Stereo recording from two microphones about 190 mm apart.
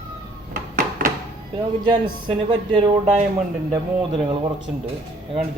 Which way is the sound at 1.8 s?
25° right (ahead or behind).